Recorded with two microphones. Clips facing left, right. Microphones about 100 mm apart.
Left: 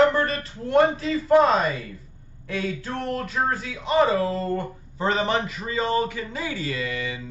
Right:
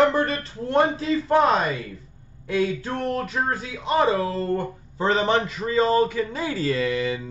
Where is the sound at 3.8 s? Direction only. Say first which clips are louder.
Left 1 dB; 30° right (ahead or behind).